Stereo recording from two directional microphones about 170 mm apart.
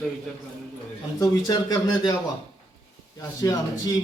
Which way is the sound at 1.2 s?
20° left (ahead or behind).